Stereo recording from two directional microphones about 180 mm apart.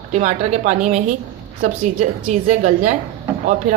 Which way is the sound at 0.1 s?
40° right (ahead or behind).